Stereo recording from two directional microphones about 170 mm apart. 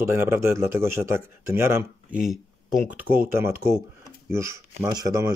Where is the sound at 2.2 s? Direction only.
Centre (ahead or behind); by 5.3 s 20° right (ahead or behind).